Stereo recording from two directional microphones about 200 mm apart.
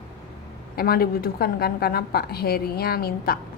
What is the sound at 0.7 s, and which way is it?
A woman's voice, 50° left (ahead or behind).